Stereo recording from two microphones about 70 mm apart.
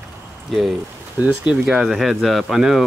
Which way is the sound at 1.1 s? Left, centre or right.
Centre.